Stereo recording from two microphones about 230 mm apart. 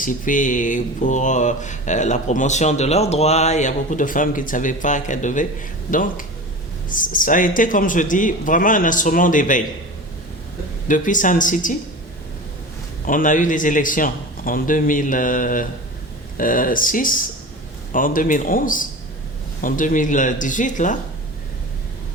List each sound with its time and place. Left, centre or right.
0.0 s speech: left
10.8 s speech: left
13.1 s speech: left